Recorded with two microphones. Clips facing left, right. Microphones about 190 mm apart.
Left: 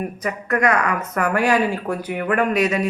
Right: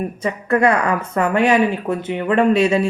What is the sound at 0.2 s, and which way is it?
Speech, 30° right (ahead or behind).